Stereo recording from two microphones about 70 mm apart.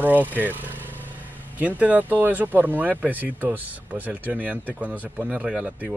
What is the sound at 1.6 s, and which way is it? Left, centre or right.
Speech, right.